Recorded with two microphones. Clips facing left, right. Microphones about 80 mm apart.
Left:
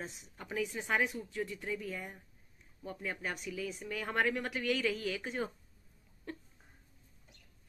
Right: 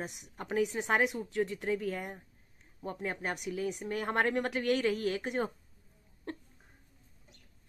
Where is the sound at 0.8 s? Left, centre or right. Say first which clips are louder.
Right 4 dB; right.